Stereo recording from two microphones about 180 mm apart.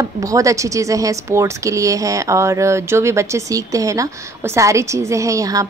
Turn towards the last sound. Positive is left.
turn(degrees=-20)  # may be behind; listen again after turning